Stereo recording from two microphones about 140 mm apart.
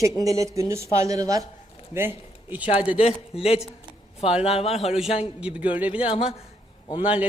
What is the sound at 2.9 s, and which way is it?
A man's voice, 45° left (ahead or behind).